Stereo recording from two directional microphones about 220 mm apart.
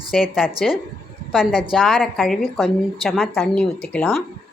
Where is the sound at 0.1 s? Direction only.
Centre (ahead or behind).